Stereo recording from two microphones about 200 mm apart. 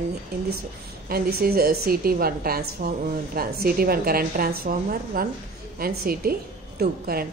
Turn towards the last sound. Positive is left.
turn(degrees=-50)  # may be behind; listen again after turning